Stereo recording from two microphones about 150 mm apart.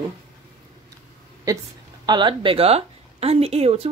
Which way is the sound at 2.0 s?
30° right (ahead or behind).